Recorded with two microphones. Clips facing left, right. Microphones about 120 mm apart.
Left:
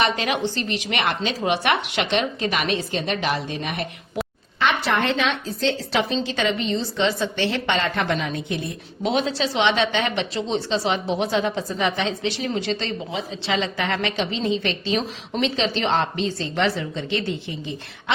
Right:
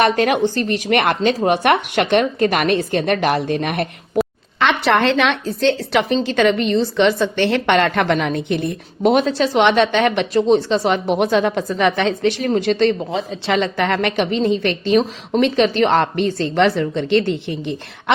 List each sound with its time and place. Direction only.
0.0 s a woman's voice: 50° right (ahead or behind)
4.6 s a woman's voice: 70° right (ahead or behind)